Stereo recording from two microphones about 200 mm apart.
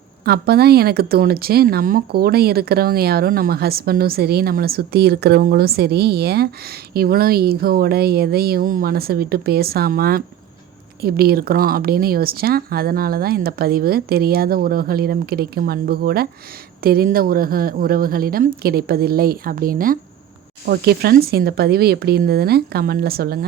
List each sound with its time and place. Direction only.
0.3 s speech: 50° right (ahead or behind)